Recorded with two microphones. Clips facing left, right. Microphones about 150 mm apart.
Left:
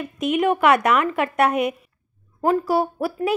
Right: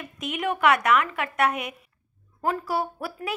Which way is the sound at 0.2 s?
40° left (ahead or behind).